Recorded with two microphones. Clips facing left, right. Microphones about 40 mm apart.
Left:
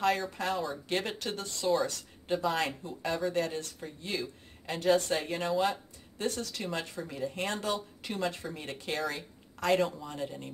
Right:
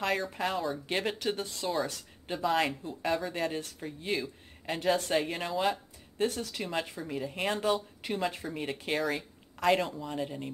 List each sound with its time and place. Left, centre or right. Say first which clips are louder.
0.0 s speech: left 2 dB; centre
0.3 s speech: right 1 dB; centre
1.3 s speech: right 1 dB; right
1.7 s speech: left 5 dB; centre
3.3 s speech: left 1 dB; centre
4.1 s speech: right 3 dB; centre
6.1 s speech: right 3 dB; centre